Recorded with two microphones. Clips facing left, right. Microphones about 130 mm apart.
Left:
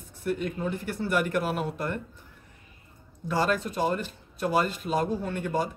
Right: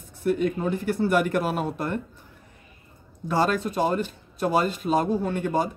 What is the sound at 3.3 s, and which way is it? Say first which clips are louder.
Speech: right 3 dB; 35° right (ahead or behind).